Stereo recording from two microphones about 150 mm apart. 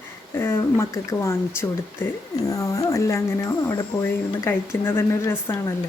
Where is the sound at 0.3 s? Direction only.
15° left (ahead or behind).